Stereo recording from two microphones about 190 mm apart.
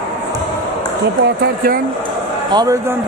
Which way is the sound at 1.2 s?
55° right (ahead or behind).